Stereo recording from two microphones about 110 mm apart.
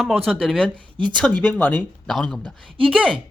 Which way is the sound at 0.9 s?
45° right (ahead or behind).